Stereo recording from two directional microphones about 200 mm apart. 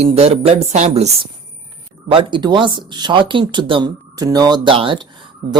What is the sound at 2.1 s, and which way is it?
Speech, 25° right (ahead or behind).